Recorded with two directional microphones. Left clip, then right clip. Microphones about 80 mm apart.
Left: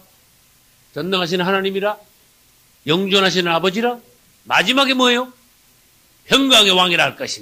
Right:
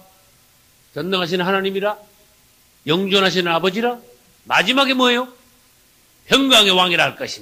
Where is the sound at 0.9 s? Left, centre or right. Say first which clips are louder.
Left 1 dB; right.